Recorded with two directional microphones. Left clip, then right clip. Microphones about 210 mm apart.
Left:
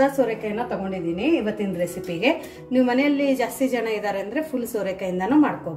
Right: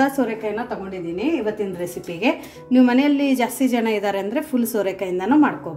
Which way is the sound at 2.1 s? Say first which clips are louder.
Even; 35° right (ahead or behind).